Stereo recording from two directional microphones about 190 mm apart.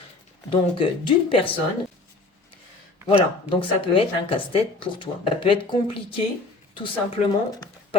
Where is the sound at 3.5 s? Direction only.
30° left (ahead or behind).